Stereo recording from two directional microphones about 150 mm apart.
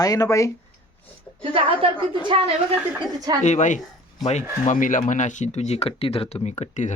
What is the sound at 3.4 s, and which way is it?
Speech, 55° left (ahead or behind).